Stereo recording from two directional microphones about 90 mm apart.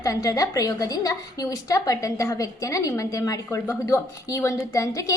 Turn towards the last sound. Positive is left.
turn(degrees=35)  # may be behind; listen again after turning